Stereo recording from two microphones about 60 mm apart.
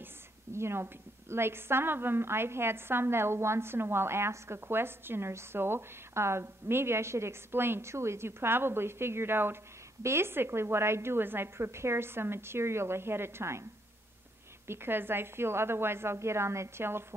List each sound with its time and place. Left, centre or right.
0.0 s a woman's voice: right
14.7 s a woman's voice: right